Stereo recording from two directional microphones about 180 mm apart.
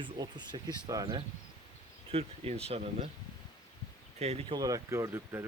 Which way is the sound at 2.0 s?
35° right (ahead or behind).